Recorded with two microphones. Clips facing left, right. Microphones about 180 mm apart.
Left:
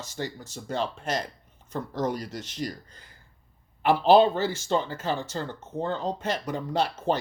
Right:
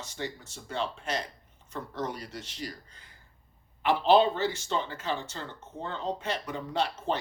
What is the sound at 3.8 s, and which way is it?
Speech, 45° left (ahead or behind).